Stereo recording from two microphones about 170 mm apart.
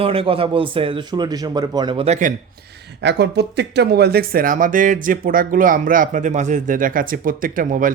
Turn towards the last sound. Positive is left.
turn(degrees=-50)  # may be behind; listen again after turning